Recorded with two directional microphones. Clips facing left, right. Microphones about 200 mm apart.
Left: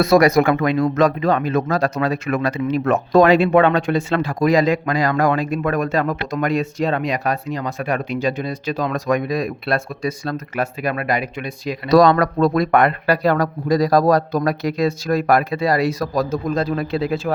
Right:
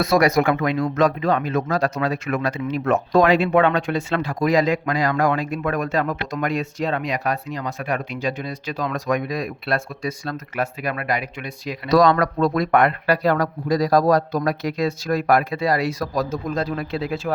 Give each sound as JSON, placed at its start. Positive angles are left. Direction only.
{"t": 0.0, "sound": "speech", "side_deg": 40}